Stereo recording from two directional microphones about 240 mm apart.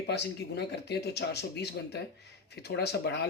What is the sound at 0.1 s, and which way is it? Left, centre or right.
Speech, left.